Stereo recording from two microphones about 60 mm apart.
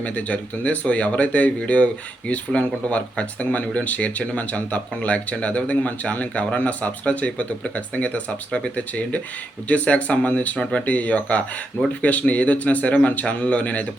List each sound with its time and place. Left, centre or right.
0.0 s speech: left